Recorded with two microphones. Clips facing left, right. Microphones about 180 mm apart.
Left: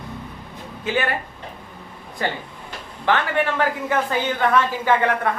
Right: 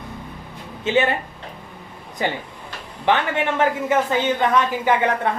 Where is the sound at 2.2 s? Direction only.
15° right (ahead or behind).